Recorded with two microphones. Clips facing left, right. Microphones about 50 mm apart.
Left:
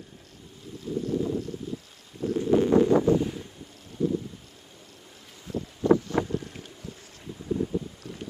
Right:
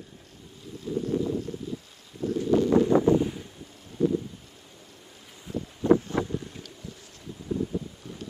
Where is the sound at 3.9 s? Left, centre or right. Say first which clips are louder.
Right 2 dB; right.